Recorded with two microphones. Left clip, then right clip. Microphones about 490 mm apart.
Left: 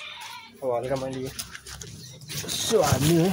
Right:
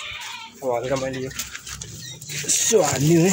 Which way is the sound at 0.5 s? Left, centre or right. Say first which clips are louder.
Right 3 dB; left.